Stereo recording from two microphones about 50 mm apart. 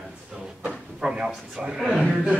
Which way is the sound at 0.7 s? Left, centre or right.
Centre.